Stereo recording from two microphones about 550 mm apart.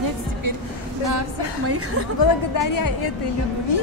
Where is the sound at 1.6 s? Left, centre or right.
Right.